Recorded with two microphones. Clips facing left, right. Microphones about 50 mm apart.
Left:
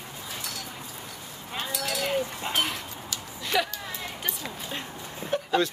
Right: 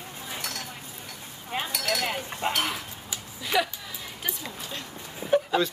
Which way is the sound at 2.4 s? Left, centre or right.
Right.